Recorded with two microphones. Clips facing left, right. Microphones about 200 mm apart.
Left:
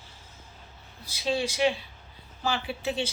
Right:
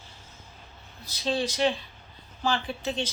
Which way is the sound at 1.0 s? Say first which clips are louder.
Even; 10° left (ahead or behind).